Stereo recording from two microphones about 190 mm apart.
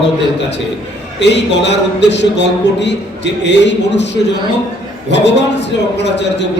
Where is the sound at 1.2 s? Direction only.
65° left (ahead or behind).